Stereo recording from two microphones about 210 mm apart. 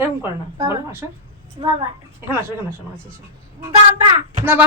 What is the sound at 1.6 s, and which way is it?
Speech, 25° right (ahead or behind).